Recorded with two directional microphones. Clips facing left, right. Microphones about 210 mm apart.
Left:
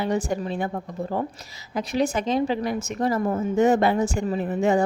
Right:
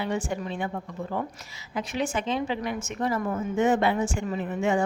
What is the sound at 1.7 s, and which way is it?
A woman's voice, 40° left (ahead or behind).